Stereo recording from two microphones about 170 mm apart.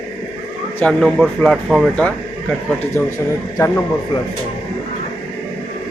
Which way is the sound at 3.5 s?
15° left (ahead or behind).